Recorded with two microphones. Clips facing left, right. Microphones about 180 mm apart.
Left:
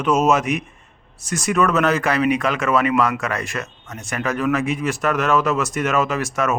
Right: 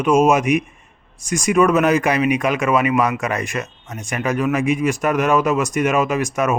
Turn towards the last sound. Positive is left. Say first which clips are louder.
# right 2 dB
turn(degrees=-15)  # may be behind; listen again after turning